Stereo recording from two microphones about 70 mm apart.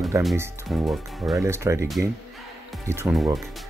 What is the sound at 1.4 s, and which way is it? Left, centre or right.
Speech, right.